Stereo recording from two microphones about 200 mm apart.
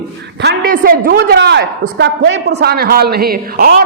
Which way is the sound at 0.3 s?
55° right (ahead or behind).